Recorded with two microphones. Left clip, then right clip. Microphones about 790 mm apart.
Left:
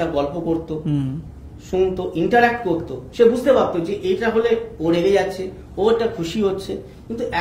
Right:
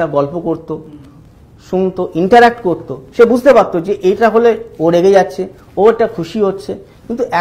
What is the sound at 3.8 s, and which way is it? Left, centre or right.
Speech, right.